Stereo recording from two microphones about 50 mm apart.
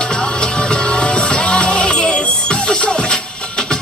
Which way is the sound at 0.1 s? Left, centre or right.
Centre.